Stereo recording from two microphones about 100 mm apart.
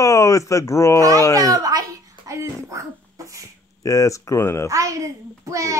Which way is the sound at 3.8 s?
35° left (ahead or behind).